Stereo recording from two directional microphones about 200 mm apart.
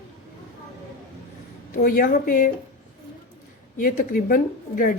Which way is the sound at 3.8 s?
45° left (ahead or behind).